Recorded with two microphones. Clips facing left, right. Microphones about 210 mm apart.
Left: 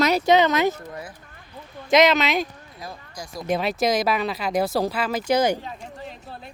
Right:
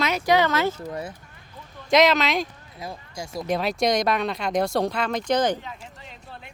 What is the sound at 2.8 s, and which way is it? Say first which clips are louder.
Speech: right 3 dB; 25° right (ahead or behind).